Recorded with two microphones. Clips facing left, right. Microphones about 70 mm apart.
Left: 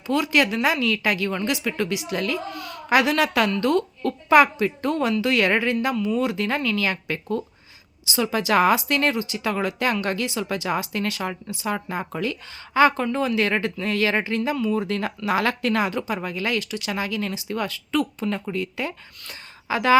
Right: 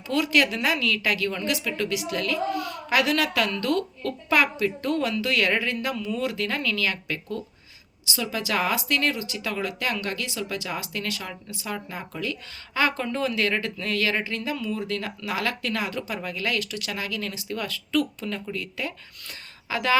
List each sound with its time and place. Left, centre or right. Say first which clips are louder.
0.1 s speech: left 2 dB; centre; by 12.3 s left
12.3 s speech: left 5 dB; centre
16.0 s a woman's voice: left 3 dB; centre